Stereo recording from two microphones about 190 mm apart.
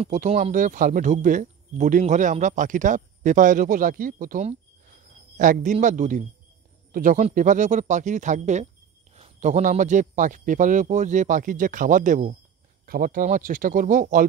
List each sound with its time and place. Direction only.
0.0 s speech: 35° right (ahead or behind)